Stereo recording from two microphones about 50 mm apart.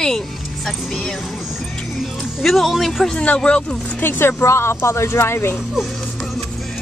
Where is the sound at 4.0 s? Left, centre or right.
Left.